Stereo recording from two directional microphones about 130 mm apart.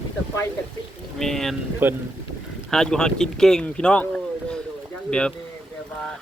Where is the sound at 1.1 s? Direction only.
5° left (ahead or behind).